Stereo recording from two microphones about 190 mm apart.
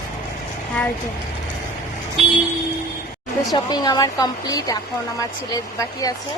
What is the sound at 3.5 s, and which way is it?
Speech, 20° left (ahead or behind).